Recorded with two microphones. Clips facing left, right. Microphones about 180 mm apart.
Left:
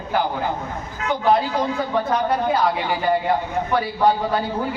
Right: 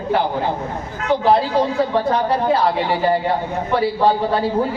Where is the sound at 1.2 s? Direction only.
30° right (ahead or behind).